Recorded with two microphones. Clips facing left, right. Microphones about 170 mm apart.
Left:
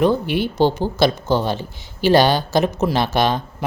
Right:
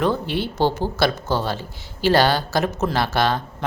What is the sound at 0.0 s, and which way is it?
Speech, 15° left (ahead or behind).